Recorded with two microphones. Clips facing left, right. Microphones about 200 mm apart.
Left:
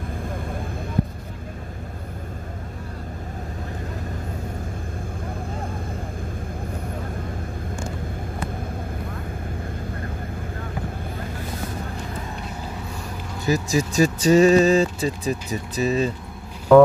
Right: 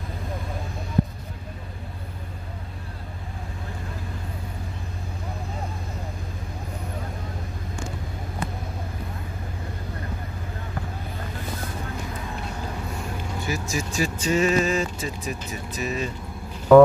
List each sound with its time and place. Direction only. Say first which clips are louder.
13.5 s speech: left 9 dB; 35° left (ahead or behind)
16.7 s music: even; centre (ahead or behind)